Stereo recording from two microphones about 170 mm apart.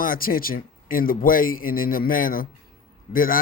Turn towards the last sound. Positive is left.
turn(degrees=55)  # may be behind; listen again after turning